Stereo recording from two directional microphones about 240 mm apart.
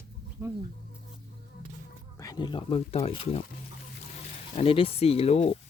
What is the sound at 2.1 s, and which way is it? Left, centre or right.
Speech, centre.